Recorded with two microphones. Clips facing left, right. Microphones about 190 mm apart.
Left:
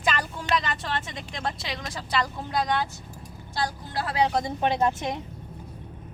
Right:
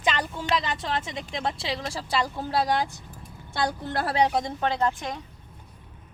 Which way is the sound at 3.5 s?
60° right (ahead or behind).